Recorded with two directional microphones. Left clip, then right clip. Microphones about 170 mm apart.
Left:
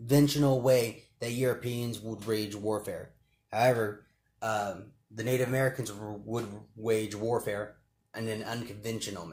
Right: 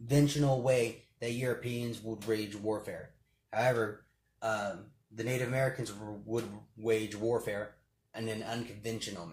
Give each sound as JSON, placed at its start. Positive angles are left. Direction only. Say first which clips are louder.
{"t": 0.1, "sound": "speech", "louder": "left 4 dB", "side_deg": 35}
{"t": 5.1, "sound": "speech", "louder": "left 4 dB", "side_deg": 40}